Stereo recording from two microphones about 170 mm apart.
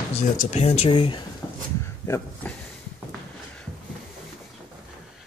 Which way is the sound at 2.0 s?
15° left (ahead or behind).